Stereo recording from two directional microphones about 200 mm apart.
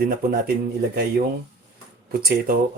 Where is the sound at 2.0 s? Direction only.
50° right (ahead or behind).